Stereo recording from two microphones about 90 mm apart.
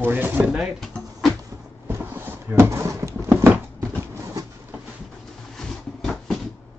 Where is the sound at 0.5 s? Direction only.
Centre (ahead or behind).